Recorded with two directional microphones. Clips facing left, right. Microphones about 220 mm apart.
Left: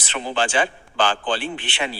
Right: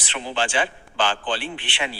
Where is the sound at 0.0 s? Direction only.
45° left (ahead or behind).